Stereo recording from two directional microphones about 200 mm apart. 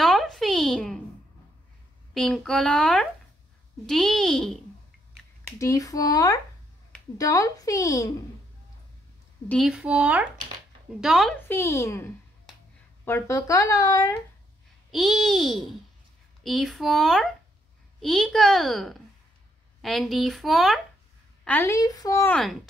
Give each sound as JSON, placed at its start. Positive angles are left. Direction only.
{"t": 0.0, "sound": "a sound", "side_deg": 0}
{"t": 2.1, "sound": "speech", "side_deg": 5}
{"t": 5.6, "sound": "speech", "side_deg": 15}
{"t": 9.5, "sound": "speech", "side_deg": -5}
{"t": 11.4, "sound": "speech", "side_deg": 15}
{"t": 14.9, "sound": "speech", "side_deg": 0}
{"t": 21.5, "sound": "speech", "side_deg": 10}
{"t": 22.3, "sound": "speech", "side_deg": 0}